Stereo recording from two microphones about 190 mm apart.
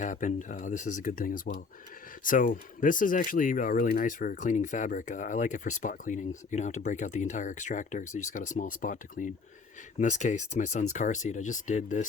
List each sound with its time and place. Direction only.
0.0 s speech: 40° left (ahead or behind)